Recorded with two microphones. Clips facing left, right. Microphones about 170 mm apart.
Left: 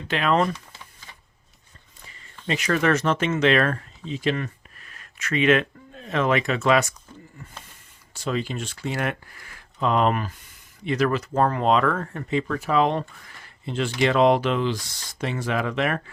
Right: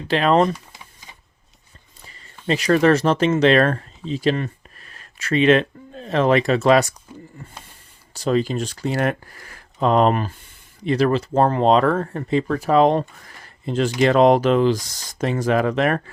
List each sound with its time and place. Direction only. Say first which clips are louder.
0.1 s speech: right 5 dB; 35° right (ahead or behind)
0.5 s typing: right 3 dB; 15° right (ahead or behind)
2.5 s speech: right 6 dB; 35° right (ahead or behind)
8.1 s speech: right 7 dB; 40° right (ahead or behind)